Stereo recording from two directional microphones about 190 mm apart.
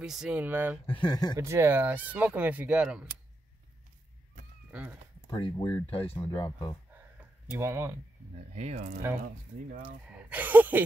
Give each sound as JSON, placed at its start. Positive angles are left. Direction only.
{"t": 0.0, "sound": "speech", "side_deg": -5}
{"t": 0.8, "sound": "speech", "side_deg": 25}
{"t": 1.4, "sound": "speech", "side_deg": -15}
{"t": 5.3, "sound": "speech", "side_deg": 20}
{"t": 7.5, "sound": "speech", "side_deg": -15}
{"t": 8.5, "sound": "speech", "side_deg": -35}
{"t": 10.3, "sound": "a sound", "side_deg": -10}